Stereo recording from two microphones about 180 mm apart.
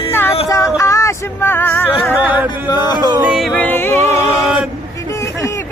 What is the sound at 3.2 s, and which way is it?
Speech, 5° right (ahead or behind).